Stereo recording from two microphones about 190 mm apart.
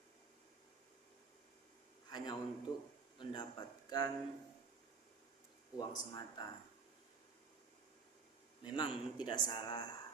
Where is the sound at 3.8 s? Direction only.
20° left (ahead or behind).